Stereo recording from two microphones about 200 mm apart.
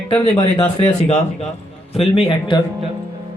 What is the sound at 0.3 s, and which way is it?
A man's voice, 25° left (ahead or behind).